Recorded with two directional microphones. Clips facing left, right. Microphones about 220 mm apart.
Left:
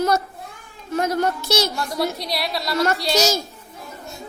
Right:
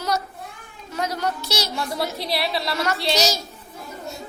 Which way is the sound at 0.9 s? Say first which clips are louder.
Left 5 dB; 50° left (ahead or behind).